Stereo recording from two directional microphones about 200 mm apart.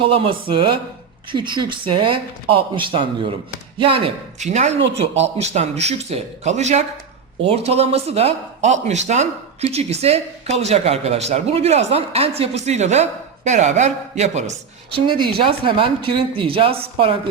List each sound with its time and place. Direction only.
0.0 s speech: 25° right (ahead or behind)
14.9 s speech: 25° right (ahead or behind)